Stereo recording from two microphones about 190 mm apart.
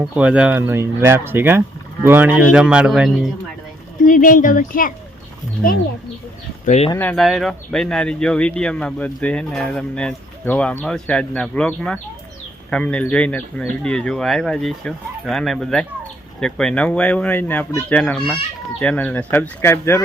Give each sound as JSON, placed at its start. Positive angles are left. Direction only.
{"t": 0.0, "sound": "speech", "side_deg": -5}
{"t": 4.0, "sound": "speech", "side_deg": 45}
{"t": 6.7, "sound": "speech", "side_deg": 35}
{"t": 6.9, "sound": "speech", "side_deg": 10}